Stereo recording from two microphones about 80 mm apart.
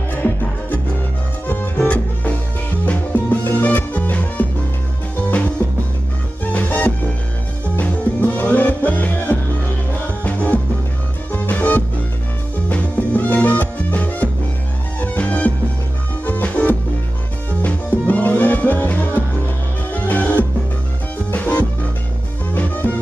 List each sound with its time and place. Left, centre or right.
0.1 s music: left
5.6 s music: left